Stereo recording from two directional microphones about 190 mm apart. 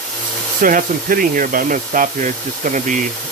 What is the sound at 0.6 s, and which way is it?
Speech, 45° right (ahead or behind).